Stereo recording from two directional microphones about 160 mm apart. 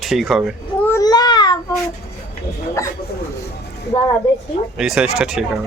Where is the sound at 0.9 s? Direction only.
25° left (ahead or behind).